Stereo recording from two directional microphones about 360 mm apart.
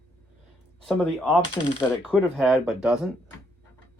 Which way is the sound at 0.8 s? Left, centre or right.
Centre.